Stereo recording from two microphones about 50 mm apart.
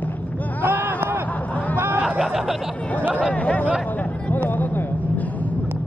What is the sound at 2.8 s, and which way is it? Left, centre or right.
Speech, left.